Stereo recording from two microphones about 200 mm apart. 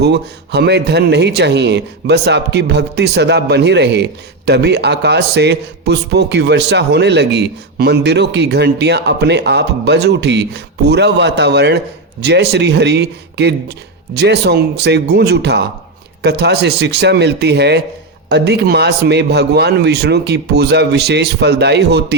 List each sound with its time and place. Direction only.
0.0 s a man's voice: 55° right (ahead or behind)